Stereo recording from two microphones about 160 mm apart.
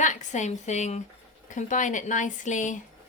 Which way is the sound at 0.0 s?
50° left (ahead or behind).